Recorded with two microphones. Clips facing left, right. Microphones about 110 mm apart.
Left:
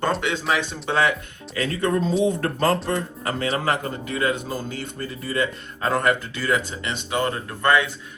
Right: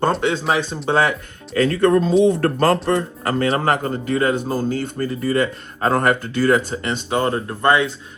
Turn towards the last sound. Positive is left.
turn(degrees=-25)  # may be behind; listen again after turning